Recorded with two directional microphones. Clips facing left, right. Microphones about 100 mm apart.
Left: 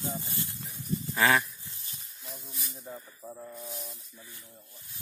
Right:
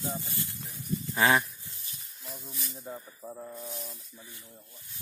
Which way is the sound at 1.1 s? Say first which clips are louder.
Even; 20° right (ahead or behind).